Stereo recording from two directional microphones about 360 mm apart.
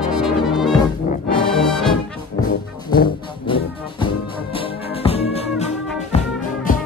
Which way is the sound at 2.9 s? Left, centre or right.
Centre.